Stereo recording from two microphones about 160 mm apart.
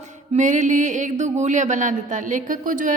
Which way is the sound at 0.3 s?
50° right (ahead or behind).